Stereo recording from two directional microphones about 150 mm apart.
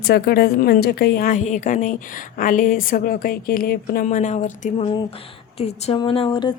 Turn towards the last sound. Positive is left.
turn(degrees=35)  # may be behind; listen again after turning